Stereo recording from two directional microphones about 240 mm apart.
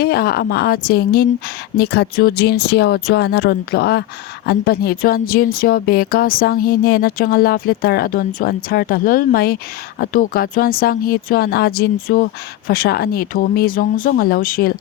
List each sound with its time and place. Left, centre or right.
0.0 s speech: left